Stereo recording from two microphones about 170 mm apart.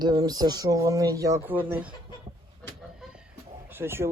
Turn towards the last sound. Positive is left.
turn(degrees=-15)  # may be behind; listen again after turning